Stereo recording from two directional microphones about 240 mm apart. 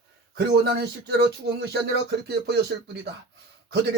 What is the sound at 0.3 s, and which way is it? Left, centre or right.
Speech, right.